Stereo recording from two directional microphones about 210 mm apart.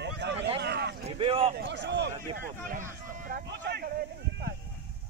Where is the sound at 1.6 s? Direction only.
55° right (ahead or behind).